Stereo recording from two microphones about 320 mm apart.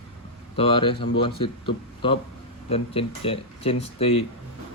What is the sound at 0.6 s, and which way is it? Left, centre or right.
Speech, centre.